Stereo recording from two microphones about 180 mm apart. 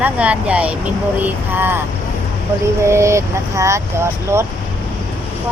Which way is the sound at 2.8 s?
15° right (ahead or behind).